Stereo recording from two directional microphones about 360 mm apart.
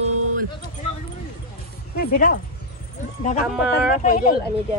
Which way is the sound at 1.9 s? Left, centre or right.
Left.